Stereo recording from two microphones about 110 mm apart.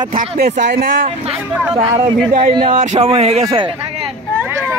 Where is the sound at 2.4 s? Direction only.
55° right (ahead or behind).